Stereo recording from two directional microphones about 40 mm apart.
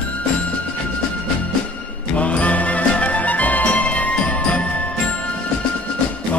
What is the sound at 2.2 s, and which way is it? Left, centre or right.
Music, left.